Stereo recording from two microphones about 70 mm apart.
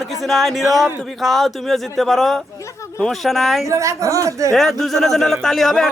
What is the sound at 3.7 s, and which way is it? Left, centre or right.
Speech, right.